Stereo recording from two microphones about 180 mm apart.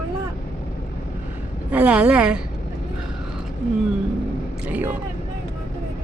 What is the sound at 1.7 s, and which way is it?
Speech, 10° right (ahead or behind).